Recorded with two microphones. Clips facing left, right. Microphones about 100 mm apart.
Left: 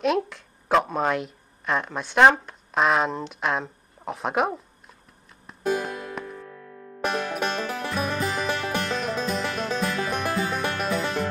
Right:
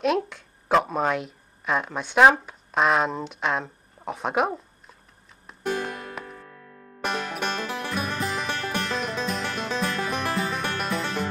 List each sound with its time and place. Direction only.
0.0 s speech: centre (ahead or behind)
5.5 s music: 5° left (ahead or behind)